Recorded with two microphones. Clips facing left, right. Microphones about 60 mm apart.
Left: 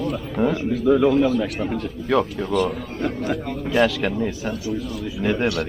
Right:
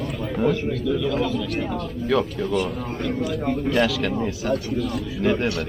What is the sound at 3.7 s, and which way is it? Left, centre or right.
Speech, centre.